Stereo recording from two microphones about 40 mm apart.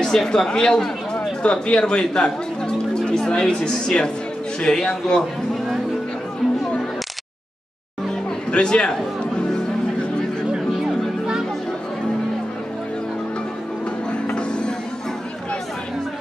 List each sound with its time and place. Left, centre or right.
0.0 s speech: centre
8.5 s speech: left
10.4 s a sound: centre
14.1 s music: left